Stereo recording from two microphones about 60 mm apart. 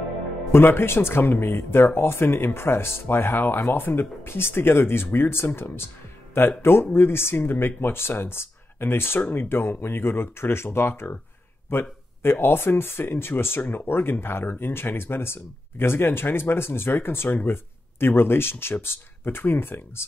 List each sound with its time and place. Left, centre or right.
0.5 s speech: left